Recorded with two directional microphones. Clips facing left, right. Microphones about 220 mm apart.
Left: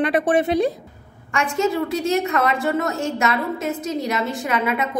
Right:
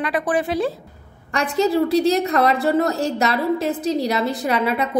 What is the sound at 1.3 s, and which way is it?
A woman's voice, 35° right (ahead or behind).